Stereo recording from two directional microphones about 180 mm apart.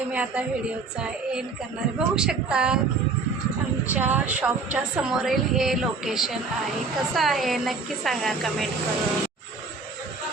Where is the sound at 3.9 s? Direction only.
10° right (ahead or behind).